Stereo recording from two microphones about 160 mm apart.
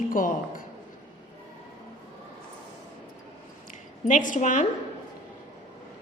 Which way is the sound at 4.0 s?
55° left (ahead or behind).